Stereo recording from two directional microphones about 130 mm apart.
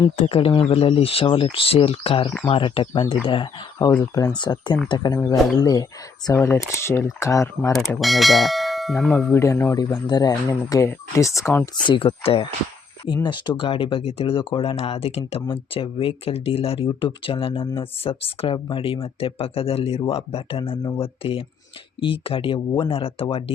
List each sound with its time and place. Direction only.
0.2 s speech: 50° left (ahead or behind)
3.9 s speech: 25° left (ahead or behind)
4.4 s speech: 35° left (ahead or behind)
6.3 s speech: 20° left (ahead or behind)
7.9 s speech: centre (ahead or behind)
9.3 s speech: 20° left (ahead or behind)
11.6 s speech: 40° left (ahead or behind)